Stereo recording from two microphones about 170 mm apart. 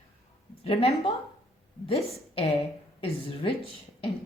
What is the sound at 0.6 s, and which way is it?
Speech, 35° left (ahead or behind).